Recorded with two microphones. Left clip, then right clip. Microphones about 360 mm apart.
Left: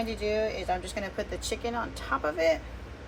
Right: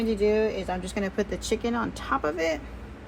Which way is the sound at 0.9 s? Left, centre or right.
Centre.